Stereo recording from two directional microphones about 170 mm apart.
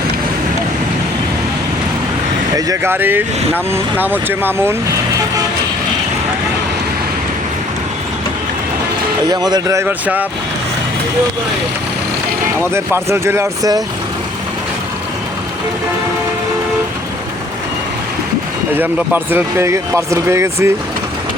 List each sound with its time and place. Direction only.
2.6 s speech: 15° right (ahead or behind)
9.3 s speech: 25° right (ahead or behind)
12.7 s speech: 15° right (ahead or behind)
18.8 s speech: 10° right (ahead or behind)